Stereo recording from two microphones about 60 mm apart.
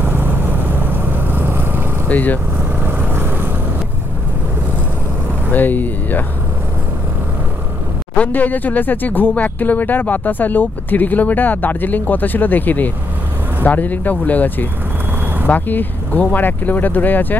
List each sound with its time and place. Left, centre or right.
0.0 s vehicle: right
2.0 s speech: left
2.8 s vehicle: right
5.5 s speech: left
8.2 s speech: left